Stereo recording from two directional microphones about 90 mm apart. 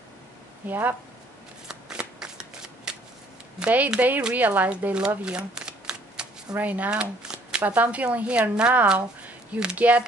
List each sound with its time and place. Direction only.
0.7 s speech: 20° right (ahead or behind)
1.7 s shuffling cards: 10° right (ahead or behind)
3.5 s speech: 15° right (ahead or behind)